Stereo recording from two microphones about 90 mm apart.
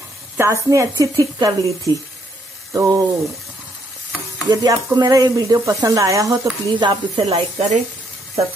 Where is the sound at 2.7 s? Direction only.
35° right (ahead or behind).